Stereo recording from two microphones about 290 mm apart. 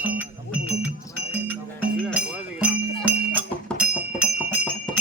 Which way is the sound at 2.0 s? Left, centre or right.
Centre.